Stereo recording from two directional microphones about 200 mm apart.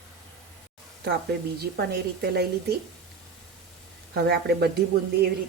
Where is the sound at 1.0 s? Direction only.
50° right (ahead or behind).